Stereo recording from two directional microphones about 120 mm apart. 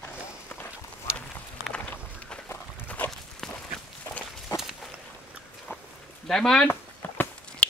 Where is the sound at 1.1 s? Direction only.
10° left (ahead or behind).